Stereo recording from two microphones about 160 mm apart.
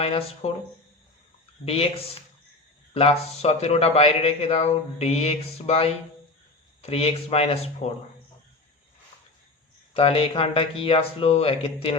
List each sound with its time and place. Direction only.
0.0 s speech: 40° left (ahead or behind)
1.6 s speech: 40° left (ahead or behind)
2.9 s speech: 40° left (ahead or behind)
9.9 s speech: 35° left (ahead or behind)